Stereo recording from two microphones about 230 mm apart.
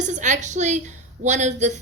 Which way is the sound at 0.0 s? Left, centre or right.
Right.